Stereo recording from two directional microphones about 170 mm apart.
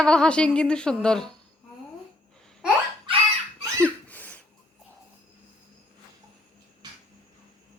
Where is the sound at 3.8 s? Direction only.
10° left (ahead or behind).